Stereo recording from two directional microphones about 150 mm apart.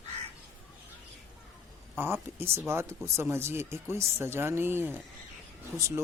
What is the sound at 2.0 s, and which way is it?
Speech, 15° right (ahead or behind).